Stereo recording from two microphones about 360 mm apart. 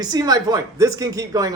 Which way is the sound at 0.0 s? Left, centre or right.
Centre.